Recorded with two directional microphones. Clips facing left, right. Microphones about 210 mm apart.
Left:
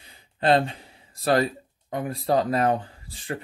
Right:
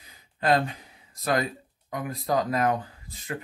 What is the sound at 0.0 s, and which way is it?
Speech, 30° left (ahead or behind).